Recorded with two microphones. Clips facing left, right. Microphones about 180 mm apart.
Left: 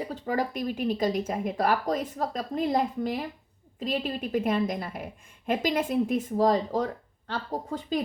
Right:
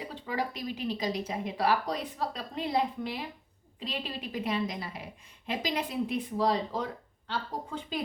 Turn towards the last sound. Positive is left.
turn(degrees=40)  # may be behind; listen again after turning